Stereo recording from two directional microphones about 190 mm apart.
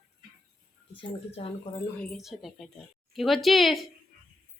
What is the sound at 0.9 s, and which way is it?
Speech, 30° left (ahead or behind).